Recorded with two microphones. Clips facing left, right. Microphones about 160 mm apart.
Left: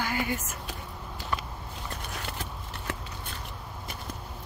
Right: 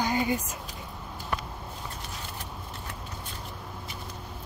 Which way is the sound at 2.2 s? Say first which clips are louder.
Left 2 dB; 90° left.